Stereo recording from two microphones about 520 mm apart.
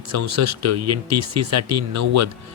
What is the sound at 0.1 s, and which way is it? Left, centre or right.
Speech, right.